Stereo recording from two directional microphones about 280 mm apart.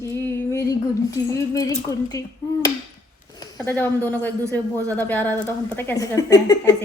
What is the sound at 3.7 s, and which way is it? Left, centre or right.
A woman's voice, centre.